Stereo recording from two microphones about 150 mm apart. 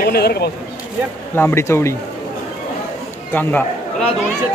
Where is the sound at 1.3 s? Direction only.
15° left (ahead or behind).